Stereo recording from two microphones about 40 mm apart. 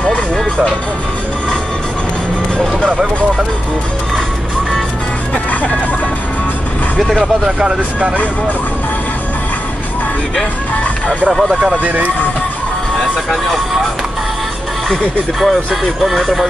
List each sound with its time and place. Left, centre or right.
5.3 s speech: left
7.4 s speech: centre
11.8 s speech: right
15.4 s speech: centre